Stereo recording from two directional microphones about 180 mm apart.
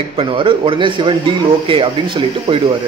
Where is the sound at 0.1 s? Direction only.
30° right (ahead or behind).